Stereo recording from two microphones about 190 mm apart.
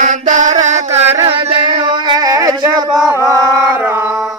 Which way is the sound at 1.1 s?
30° right (ahead or behind).